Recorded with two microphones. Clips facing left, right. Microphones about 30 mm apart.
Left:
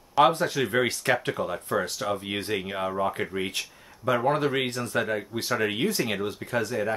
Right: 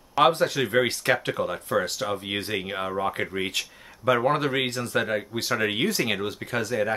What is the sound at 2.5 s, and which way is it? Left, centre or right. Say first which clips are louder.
Speech: left 3 dB; centre.